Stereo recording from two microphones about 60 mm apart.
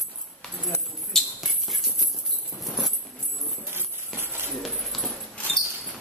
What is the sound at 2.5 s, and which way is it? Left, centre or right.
Jingle bell, left.